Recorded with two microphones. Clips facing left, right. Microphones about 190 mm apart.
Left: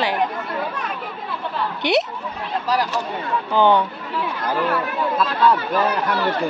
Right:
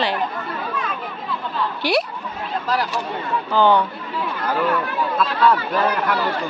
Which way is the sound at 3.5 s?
20° left (ahead or behind).